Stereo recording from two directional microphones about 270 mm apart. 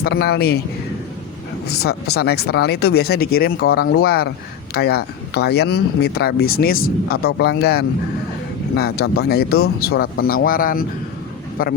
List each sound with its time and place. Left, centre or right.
0.0 s speech: left
1.6 s speech: left